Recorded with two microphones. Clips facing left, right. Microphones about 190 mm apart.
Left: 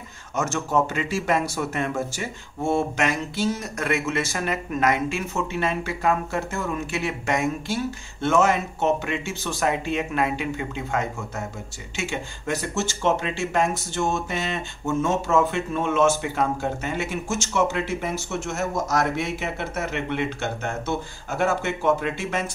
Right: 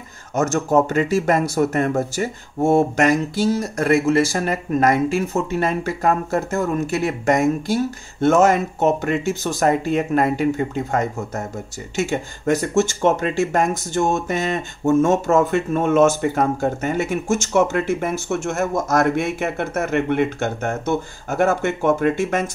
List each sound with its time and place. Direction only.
0.3 s speech: 40° right (ahead or behind)